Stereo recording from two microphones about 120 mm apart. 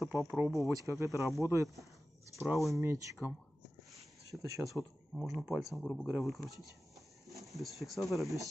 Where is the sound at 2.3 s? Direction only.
Centre (ahead or behind).